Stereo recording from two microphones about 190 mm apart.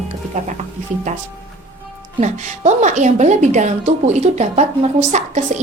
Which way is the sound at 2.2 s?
40° right (ahead or behind).